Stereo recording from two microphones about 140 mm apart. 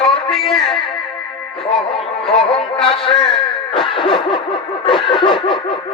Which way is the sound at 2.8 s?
40° left (ahead or behind).